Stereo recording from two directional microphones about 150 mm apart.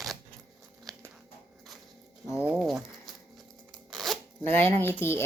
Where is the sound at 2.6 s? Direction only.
Centre (ahead or behind).